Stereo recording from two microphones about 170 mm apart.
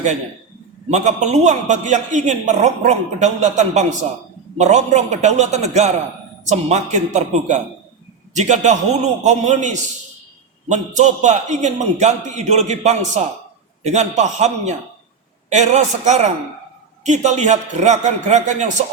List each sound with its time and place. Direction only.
0.9 s a man's voice: 45° right (ahead or behind)